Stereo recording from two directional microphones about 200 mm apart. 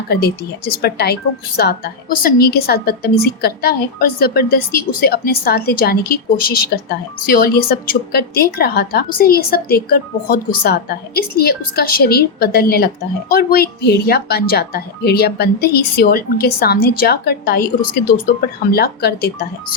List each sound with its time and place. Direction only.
0.1 s speech: 50° left (ahead or behind)